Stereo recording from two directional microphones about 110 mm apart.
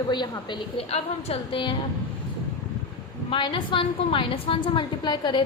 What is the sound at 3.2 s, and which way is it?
A woman's voice, 45° left (ahead or behind).